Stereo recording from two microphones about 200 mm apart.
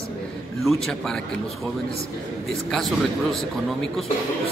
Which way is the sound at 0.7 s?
Centre (ahead or behind).